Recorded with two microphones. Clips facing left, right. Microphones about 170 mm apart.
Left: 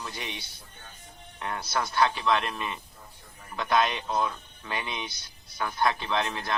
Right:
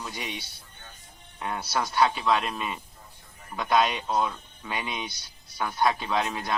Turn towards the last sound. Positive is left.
turn(degrees=-10)  # may be behind; listen again after turning